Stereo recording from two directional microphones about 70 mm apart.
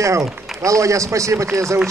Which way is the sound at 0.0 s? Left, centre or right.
Right.